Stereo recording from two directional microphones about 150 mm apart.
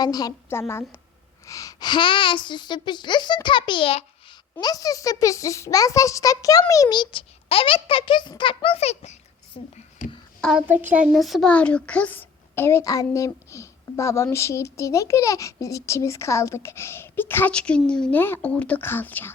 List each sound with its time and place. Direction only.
0.0 s a woman's voice: 25° left (ahead or behind)
4.6 s a child's voice: 25° left (ahead or behind)
10.7 s speech: 10° right (ahead or behind)
11.1 s a woman's voice: centre (ahead or behind)